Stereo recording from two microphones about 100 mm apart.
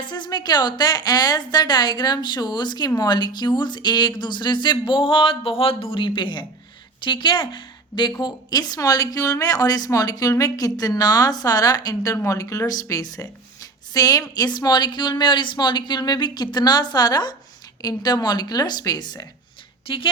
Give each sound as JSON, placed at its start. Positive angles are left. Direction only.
{"t": 0.0, "sound": "a woman's voice", "side_deg": 45}
{"t": 19.9, "sound": "a woman's voice", "side_deg": 60}